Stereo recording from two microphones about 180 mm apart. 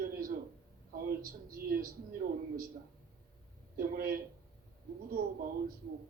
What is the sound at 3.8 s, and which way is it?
Speech, 55° right (ahead or behind).